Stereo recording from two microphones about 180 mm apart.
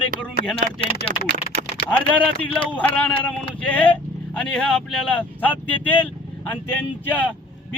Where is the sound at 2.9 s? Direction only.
5° left (ahead or behind).